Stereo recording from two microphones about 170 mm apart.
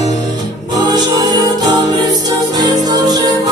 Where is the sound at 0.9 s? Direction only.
25° right (ahead or behind).